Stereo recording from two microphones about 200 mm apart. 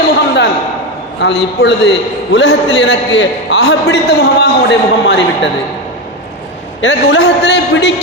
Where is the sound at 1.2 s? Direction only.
55° left (ahead or behind).